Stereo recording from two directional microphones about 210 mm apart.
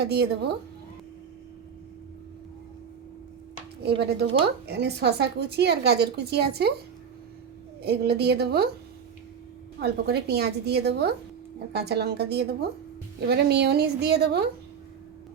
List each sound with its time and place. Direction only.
0.0 s a woman's voice: 50° right (ahead or behind)
4.0 s a woman's voice: 50° right (ahead or behind)
7.8 s a woman's voice: 50° right (ahead or behind)
9.8 s a woman's voice: 50° right (ahead or behind)